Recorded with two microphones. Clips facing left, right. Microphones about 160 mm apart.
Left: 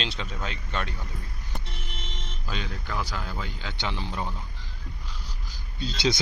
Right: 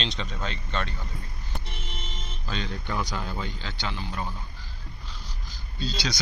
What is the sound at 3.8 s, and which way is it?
Speech, 25° left (ahead or behind).